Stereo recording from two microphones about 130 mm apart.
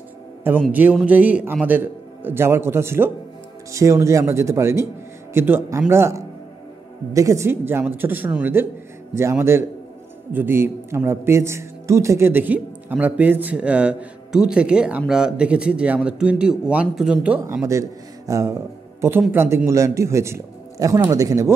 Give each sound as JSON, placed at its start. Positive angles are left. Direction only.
{"t": 0.7, "sound": "a man's voice", "side_deg": -15}
{"t": 17.5, "sound": "a man's voice", "side_deg": -25}